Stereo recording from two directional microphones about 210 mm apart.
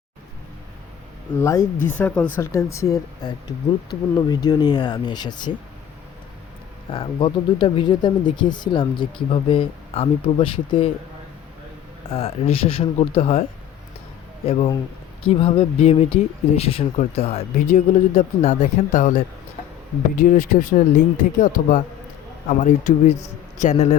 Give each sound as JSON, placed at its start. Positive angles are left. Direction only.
{"t": 1.4, "sound": "speech", "side_deg": 15}
{"t": 6.9, "sound": "speech", "side_deg": 25}
{"t": 12.0, "sound": "speech", "side_deg": 25}
{"t": 14.4, "sound": "speech", "side_deg": 30}